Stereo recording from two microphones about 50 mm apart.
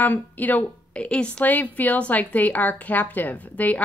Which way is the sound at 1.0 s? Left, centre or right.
Left.